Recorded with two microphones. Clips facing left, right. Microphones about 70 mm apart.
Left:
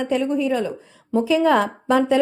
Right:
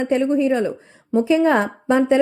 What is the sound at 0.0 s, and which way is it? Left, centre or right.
Speech, right.